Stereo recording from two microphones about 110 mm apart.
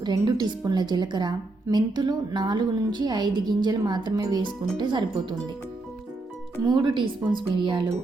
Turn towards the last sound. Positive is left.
turn(degrees=-45)  # may be behind; listen again after turning